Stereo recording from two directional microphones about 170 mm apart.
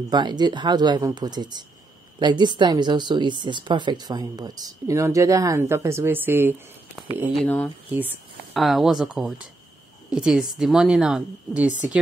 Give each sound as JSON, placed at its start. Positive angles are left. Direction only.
{"t": 0.1, "sound": "speech", "side_deg": -25}
{"t": 7.3, "sound": "speech", "side_deg": 10}
{"t": 7.9, "sound": "speech", "side_deg": -10}
{"t": 8.5, "sound": "a woman's voice", "side_deg": 0}